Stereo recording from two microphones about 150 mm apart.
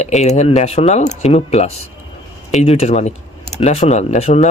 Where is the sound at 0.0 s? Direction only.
50° left (ahead or behind).